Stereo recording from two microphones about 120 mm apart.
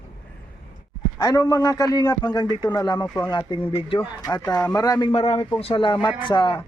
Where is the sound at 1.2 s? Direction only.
30° left (ahead or behind).